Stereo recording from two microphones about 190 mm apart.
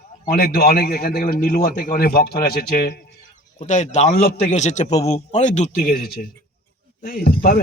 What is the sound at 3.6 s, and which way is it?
Speech, 40° left (ahead or behind).